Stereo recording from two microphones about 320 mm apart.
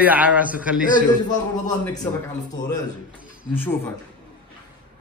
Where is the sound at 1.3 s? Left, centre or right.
Centre.